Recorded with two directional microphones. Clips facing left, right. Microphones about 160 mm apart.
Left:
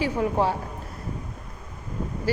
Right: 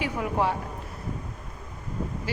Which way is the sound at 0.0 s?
30° left (ahead or behind).